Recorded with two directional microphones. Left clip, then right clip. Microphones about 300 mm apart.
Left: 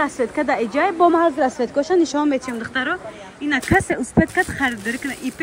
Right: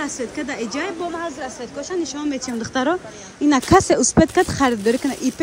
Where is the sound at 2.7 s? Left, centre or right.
Centre.